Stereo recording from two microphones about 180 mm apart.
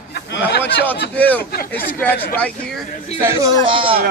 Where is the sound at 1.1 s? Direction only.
10° left (ahead or behind).